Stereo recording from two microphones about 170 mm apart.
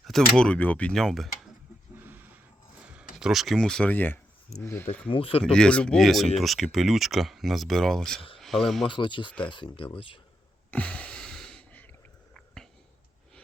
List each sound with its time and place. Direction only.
0.0 s speech: 5° left (ahead or behind)
2.0 s wild animals: 10° right (ahead or behind)
2.8 s speech: 5° right (ahead or behind); by 4.9 s 15° left (ahead or behind)
5.0 s speech: 35° left (ahead or behind)
5.4 s speech: 5° left (ahead or behind)
8.9 s speech: 30° left (ahead or behind)
10.7 s a sound: 10° left (ahead or behind)